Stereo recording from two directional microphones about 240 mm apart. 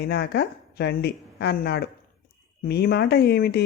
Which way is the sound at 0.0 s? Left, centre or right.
Left.